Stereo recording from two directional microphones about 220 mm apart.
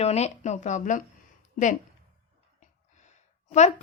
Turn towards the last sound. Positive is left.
turn(degrees=30)  # may be behind; listen again after turning